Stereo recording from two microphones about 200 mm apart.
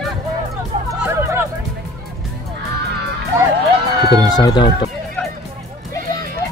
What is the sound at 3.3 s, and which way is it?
Music, 15° right (ahead or behind).